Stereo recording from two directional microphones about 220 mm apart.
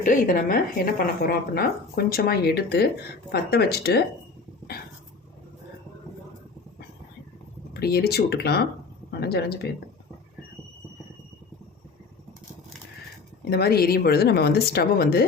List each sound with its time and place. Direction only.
0.0 s a woman's voice: 35° left (ahead or behind)
7.7 s speech: 45° left (ahead or behind)
13.5 s speech: 45° left (ahead or behind)